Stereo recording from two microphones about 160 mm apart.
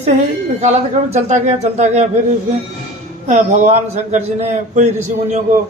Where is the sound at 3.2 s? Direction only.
45° right (ahead or behind).